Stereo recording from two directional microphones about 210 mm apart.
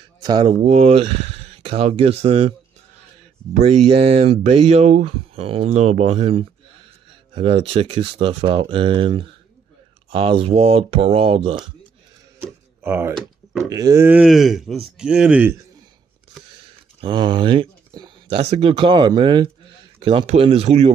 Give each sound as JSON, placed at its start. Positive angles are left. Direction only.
{"t": 0.2, "sound": "speech", "side_deg": -20}
{"t": 0.6, "sound": "speech", "side_deg": -30}
{"t": 3.6, "sound": "speech", "side_deg": -30}
{"t": 12.8, "sound": "speech", "side_deg": -10}
{"t": 13.7, "sound": "speech", "side_deg": -15}
{"t": 17.0, "sound": "speech", "side_deg": -20}